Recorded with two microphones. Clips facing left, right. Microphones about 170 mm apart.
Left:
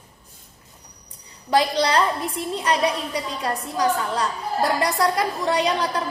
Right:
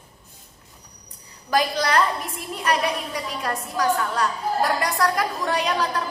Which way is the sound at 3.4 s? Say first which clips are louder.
Even; 25° left (ahead or behind).